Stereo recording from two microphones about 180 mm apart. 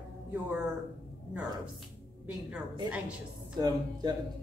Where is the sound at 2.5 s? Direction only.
5° right (ahead or behind).